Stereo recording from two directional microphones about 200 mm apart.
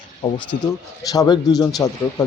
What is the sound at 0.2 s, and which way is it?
Speech, 20° left (ahead or behind).